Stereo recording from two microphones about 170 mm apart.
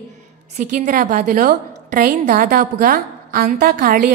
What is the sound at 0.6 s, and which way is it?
A woman's voice, 50° right (ahead or behind).